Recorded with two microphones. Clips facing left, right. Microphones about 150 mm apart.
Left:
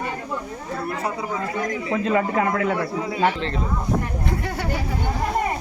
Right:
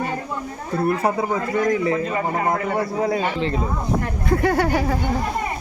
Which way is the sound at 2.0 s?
80° left.